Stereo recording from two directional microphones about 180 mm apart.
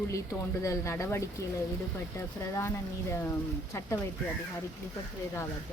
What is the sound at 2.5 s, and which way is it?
Speech, 15° left (ahead or behind).